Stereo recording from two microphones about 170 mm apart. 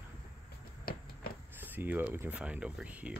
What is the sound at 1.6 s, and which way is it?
Speech, 10° right (ahead or behind).